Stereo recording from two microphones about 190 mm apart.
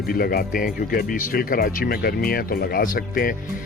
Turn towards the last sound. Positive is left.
turn(degrees=45)  # may be behind; listen again after turning